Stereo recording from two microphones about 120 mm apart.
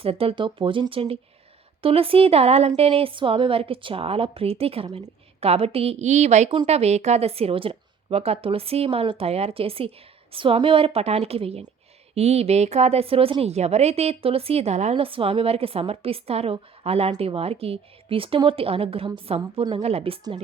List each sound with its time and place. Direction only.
0.0 s a woman's voice: 50° right (ahead or behind); by 6.5 s 75° right (ahead or behind)
6.7 s a woman's voice: 65° right (ahead or behind)
14.9 s a woman's voice: 50° right (ahead or behind)